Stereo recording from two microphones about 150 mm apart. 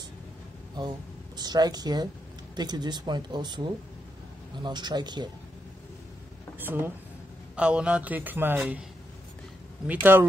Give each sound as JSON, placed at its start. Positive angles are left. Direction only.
{"t": 0.7, "sound": "speech", "side_deg": -30}
{"t": 6.6, "sound": "a man's voice", "side_deg": -15}
{"t": 9.8, "sound": "a man's voice", "side_deg": -15}